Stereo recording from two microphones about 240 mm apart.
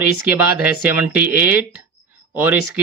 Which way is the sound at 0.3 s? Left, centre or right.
Centre.